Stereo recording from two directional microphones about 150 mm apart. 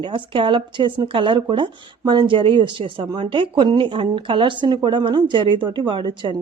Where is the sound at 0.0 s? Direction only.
35° right (ahead or behind).